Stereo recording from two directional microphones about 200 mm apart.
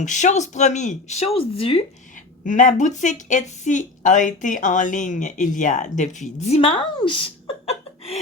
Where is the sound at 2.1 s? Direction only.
40° left (ahead or behind).